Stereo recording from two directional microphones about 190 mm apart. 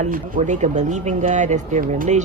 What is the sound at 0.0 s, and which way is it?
Speech, 40° right (ahead or behind).